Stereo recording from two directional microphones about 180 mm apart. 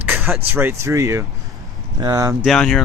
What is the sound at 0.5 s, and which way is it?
Speech, 10° right (ahead or behind).